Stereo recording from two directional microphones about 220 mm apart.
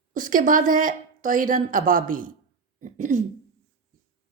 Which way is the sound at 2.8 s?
35° right (ahead or behind).